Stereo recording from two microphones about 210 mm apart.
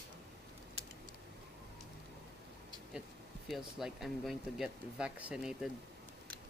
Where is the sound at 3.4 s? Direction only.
Centre (ahead or behind).